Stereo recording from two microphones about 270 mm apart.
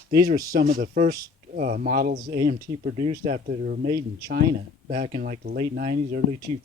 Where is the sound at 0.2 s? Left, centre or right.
Right.